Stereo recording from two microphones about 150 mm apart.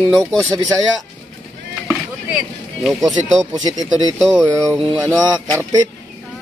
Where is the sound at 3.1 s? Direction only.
5° left (ahead or behind).